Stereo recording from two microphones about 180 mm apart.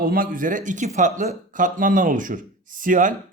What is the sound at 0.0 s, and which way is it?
Speech, 50° right (ahead or behind).